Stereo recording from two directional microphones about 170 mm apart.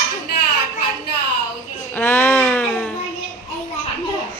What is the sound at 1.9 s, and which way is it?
Speech, 15° left (ahead or behind).